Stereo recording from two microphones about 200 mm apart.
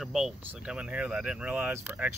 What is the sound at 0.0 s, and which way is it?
Speech, centre (ahead or behind).